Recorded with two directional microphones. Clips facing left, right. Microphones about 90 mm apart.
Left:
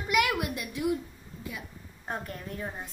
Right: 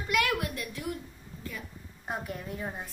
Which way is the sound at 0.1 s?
15° left (ahead or behind).